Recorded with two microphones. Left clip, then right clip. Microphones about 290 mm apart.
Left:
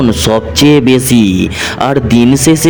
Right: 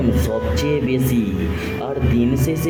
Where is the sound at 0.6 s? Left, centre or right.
Left.